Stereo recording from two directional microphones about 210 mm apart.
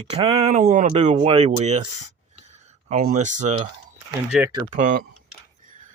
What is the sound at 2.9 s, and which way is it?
Speech, 40° right (ahead or behind).